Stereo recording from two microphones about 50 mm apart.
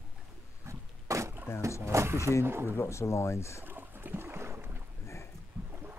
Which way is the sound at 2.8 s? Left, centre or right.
Left.